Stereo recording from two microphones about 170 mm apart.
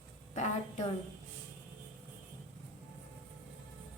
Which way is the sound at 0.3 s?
40° left (ahead or behind).